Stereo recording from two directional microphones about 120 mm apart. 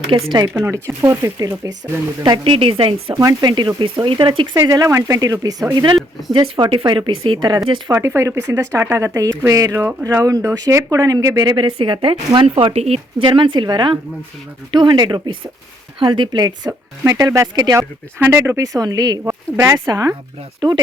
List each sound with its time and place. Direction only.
0.1 s speech: 45° right (ahead or behind)
0.5 s speech: 20° right (ahead or behind)
2.4 s speech: 50° right (ahead or behind)
3.2 s speech: 35° right (ahead or behind)
6.0 s speech: centre (ahead or behind)
6.3 s speech: 45° right (ahead or behind)
7.9 s speech: 25° right (ahead or behind); by 13.2 s 60° right (ahead or behind)
13.2 s speech: 45° right (ahead or behind)
18.2 s speech: 20° right (ahead or behind)